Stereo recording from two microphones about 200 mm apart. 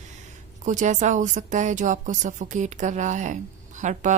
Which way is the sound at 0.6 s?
40° right (ahead or behind).